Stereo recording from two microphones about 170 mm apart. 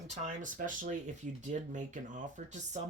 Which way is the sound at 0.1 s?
45° right (ahead or behind).